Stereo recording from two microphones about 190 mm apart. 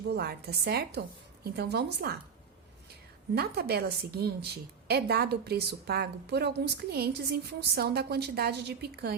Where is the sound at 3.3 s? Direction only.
60° right (ahead or behind).